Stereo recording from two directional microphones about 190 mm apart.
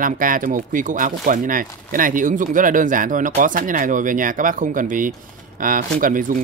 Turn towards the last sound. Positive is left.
turn(degrees=-45)  # may be behind; listen again after turning